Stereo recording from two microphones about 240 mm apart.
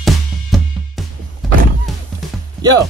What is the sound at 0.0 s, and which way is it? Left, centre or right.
Music, centre.